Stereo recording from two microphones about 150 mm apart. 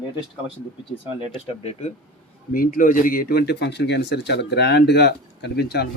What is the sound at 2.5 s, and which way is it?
Speech, 65° left (ahead or behind).